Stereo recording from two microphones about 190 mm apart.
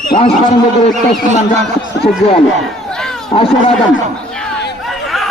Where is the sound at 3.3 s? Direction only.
30° left (ahead or behind).